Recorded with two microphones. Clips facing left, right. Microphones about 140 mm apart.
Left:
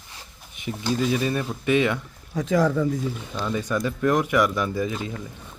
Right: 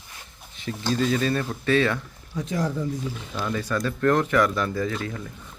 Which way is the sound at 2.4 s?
80° left.